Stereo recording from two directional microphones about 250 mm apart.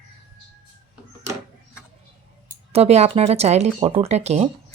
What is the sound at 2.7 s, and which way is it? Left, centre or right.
Speech, right.